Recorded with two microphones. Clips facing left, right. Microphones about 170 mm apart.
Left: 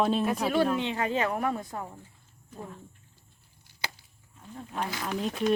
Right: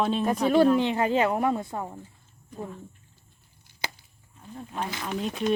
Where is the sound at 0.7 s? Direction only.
30° right (ahead or behind).